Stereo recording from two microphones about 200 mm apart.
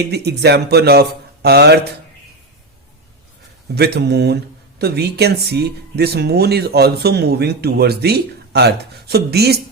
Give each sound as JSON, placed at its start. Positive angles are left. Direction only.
{"t": 0.0, "sound": "speech", "side_deg": -55}
{"t": 3.8, "sound": "speech", "side_deg": -55}